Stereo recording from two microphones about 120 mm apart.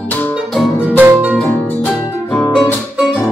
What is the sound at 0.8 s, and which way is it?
Music, 15° right (ahead or behind).